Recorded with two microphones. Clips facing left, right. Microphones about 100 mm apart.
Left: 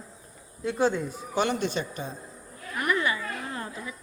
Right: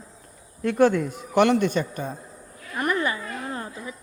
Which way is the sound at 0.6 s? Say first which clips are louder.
Right 6 dB; 65° right (ahead or behind).